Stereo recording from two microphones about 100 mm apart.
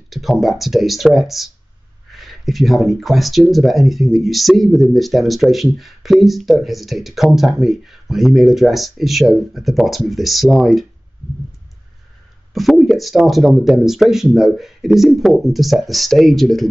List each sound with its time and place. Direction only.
0.1 s speech: centre (ahead or behind)
12.5 s speech: centre (ahead or behind)